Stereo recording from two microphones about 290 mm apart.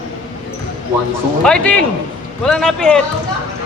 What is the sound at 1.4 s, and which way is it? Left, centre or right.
A man's voice, centre.